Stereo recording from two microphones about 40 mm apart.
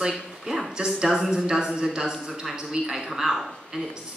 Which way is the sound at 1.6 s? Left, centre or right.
Right.